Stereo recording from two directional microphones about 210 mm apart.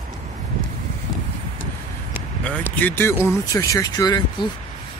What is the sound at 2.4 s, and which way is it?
Speech, 10° left (ahead or behind).